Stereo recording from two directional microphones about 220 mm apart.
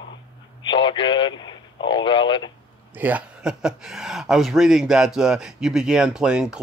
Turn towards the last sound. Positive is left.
turn(degrees=-5)  # may be behind; listen again after turning